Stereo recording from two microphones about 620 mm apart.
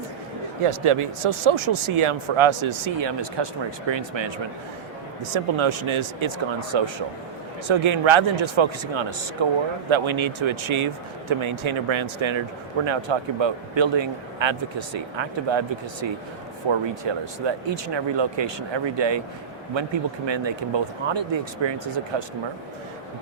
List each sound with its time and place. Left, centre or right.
0.6 s speech: right
5.3 s speech: right